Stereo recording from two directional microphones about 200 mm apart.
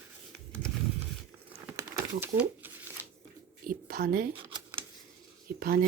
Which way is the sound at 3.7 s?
45° right (ahead or behind).